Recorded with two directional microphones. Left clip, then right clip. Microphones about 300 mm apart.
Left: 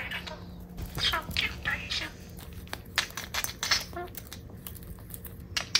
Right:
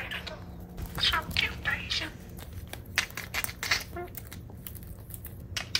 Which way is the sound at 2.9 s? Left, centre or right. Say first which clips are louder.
Even; centre.